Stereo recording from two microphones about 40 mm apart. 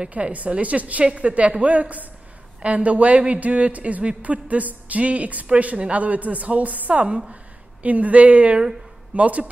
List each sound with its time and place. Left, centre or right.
0.1 s speech: right